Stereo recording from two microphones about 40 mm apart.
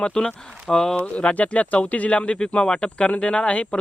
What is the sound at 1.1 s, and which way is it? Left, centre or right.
Speech, left.